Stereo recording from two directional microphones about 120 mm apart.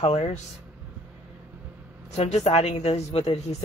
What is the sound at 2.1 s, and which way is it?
Speech, 65° left (ahead or behind).